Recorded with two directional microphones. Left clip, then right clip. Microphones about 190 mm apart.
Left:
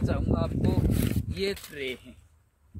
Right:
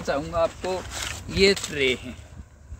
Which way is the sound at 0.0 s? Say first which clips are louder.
Right 7 dB; 25° left (ahead or behind).